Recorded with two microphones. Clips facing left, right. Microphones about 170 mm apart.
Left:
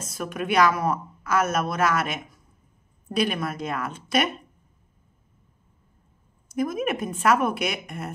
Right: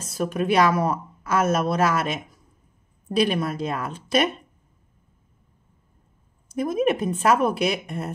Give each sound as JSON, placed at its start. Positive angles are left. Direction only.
{"t": 0.0, "sound": "a woman's voice", "side_deg": -30}
{"t": 6.5, "sound": "a woman's voice", "side_deg": -30}